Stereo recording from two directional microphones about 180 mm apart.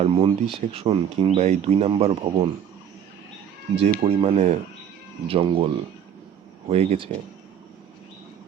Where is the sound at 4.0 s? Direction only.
35° right (ahead or behind).